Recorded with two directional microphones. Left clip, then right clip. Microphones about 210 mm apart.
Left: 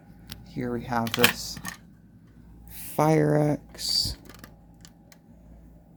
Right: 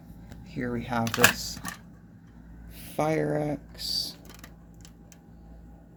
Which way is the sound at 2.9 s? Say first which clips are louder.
Left 5 dB; 35° left (ahead or behind).